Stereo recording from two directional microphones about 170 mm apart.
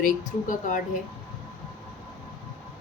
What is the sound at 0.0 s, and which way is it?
Speech, 50° left (ahead or behind).